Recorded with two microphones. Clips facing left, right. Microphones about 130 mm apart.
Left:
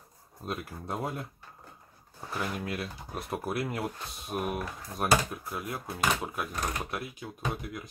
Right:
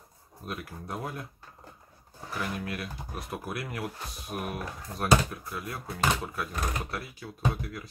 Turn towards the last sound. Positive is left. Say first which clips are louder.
# right 3 dB
turn(degrees=20)  # may be behind; listen again after turning